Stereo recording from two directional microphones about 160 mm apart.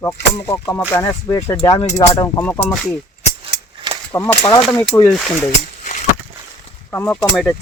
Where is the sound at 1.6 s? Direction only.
25° left (ahead or behind).